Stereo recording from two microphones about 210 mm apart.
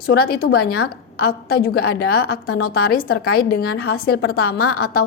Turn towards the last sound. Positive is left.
turn(degrees=45)  # may be behind; listen again after turning